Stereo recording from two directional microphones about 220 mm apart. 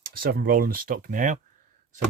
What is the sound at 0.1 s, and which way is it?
Speech, 40° right (ahead or behind).